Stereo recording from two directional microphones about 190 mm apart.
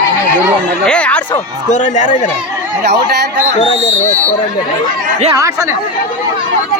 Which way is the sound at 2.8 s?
60° right (ahead or behind).